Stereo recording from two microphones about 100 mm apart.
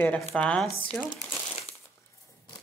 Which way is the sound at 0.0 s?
15° left (ahead or behind).